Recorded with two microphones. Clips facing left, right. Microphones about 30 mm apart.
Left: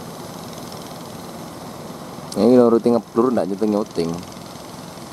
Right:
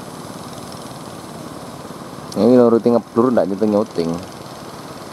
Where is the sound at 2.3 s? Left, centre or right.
Centre.